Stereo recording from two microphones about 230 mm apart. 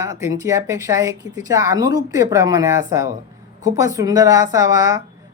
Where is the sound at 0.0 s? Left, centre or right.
Centre.